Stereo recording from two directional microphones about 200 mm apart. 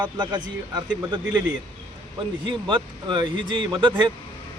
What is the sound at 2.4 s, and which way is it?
Speech, 25° right (ahead or behind).